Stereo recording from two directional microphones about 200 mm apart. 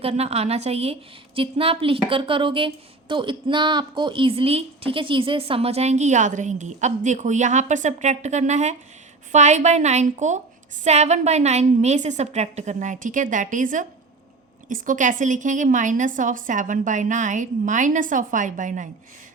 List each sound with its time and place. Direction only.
0.0 s a woman's voice: 30° right (ahead or behind)